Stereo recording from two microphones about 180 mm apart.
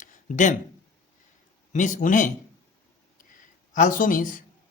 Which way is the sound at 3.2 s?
45° left (ahead or behind).